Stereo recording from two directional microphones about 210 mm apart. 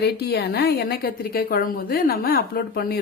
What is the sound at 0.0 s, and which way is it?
A woman's voice, 50° left (ahead or behind).